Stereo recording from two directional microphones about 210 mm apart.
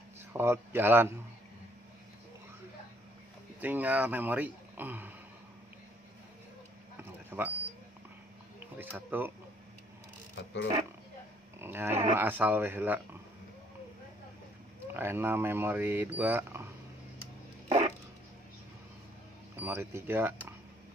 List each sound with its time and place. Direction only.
0.3 s speech: 10° right (ahead or behind)
3.6 s speech: 5° right (ahead or behind)
7.0 s a sound: 10° right (ahead or behind)
8.5 s speech: 10° right (ahead or behind)
11.6 s speech: 10° right (ahead or behind)
14.9 s speech: 10° right (ahead or behind)
17.6 s a sound: 30° right (ahead or behind)
19.5 s speech: 10° right (ahead or behind)